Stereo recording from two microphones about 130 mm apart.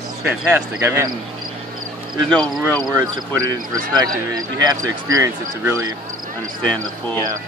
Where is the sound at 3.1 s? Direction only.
25° right (ahead or behind).